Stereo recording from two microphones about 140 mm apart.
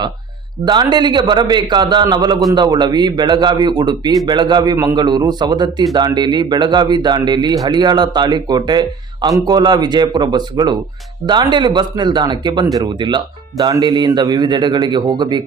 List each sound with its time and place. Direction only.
0.6 s a man's voice: 30° right (ahead or behind)